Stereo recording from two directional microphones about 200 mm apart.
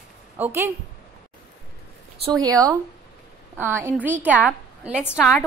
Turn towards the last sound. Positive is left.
turn(degrees=0)  # may be behind; listen again after turning